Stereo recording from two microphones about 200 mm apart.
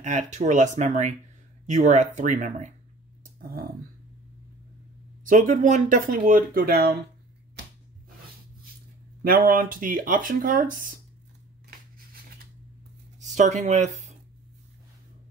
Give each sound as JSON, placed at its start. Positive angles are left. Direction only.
{"t": 0.0, "sound": "speech", "side_deg": -35}
{"t": 5.2, "sound": "speech", "side_deg": -40}
{"t": 9.2, "sound": "speech", "side_deg": -45}
{"t": 13.2, "sound": "speech", "side_deg": -35}